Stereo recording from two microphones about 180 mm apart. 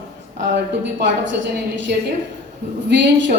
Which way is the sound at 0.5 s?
85° right.